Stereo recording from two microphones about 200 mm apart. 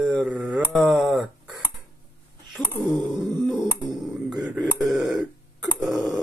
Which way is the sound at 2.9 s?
20° right (ahead or behind).